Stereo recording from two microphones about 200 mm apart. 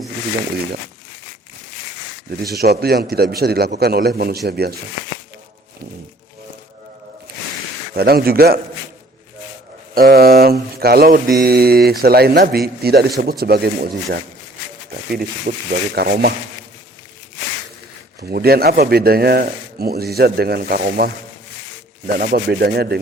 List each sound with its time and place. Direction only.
2.3 s mantra: 50° right (ahead or behind)
7.9 s mantra: 50° right (ahead or behind)
9.9 s mantra: 50° right (ahead or behind)
15.5 s mantra: 45° right (ahead or behind)
18.2 s mantra: 50° right (ahead or behind)